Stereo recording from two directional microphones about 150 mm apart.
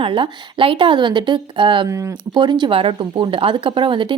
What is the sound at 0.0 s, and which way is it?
Speech, 35° right (ahead or behind).